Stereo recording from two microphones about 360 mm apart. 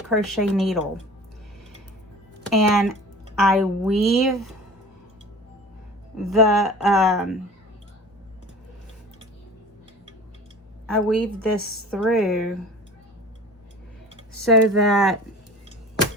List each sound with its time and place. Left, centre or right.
0.1 s speech: centre
2.5 s speech: centre
6.1 s speech: centre
10.8 s a woman's voice: centre
14.4 s speech: centre